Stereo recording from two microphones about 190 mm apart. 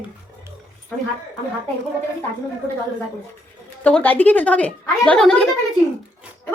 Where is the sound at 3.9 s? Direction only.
10° left (ahead or behind).